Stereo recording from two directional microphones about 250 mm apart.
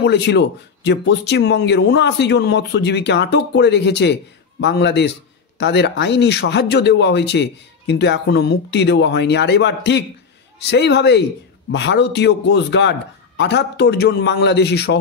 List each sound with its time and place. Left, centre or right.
0.0 s speech: left